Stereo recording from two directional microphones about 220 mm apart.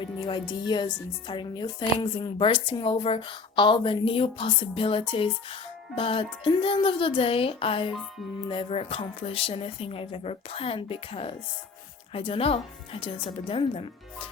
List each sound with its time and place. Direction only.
0.0 s speech: 20° left (ahead or behind)